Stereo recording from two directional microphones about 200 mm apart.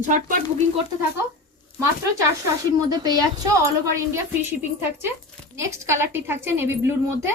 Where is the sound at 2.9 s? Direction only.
20° right (ahead or behind).